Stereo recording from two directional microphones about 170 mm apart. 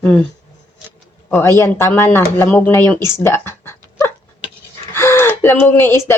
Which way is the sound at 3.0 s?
15° left (ahead or behind).